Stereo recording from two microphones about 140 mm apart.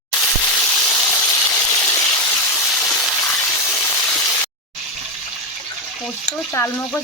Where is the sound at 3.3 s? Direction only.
20° left (ahead or behind).